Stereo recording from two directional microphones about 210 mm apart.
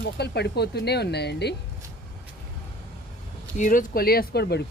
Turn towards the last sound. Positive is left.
turn(degrees=50)  # may be behind; listen again after turning